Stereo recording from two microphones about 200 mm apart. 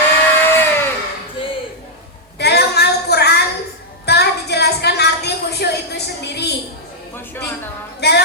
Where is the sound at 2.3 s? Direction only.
55° left (ahead or behind).